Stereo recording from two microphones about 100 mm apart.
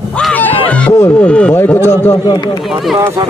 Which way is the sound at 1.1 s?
10° left (ahead or behind).